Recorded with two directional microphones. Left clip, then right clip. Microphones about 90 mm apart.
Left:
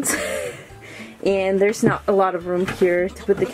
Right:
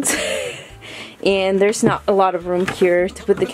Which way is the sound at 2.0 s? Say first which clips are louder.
Right 3 dB; 15° right (ahead or behind).